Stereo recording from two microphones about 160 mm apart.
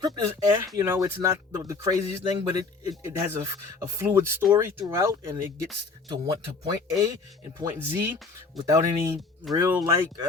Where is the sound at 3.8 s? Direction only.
15° right (ahead or behind).